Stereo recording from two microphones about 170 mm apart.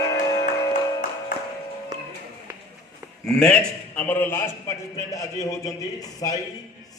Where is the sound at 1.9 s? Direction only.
20° right (ahead or behind).